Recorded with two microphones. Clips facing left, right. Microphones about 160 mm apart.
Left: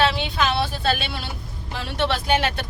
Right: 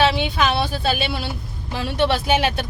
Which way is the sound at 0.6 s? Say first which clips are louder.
Right 1 dB; 5° right (ahead or behind).